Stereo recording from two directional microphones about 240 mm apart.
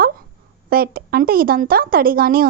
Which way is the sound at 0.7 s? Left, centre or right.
Right.